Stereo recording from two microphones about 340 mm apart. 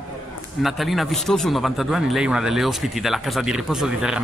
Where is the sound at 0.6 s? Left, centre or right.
Centre.